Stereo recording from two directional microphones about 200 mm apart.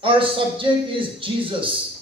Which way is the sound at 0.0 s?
25° right (ahead or behind).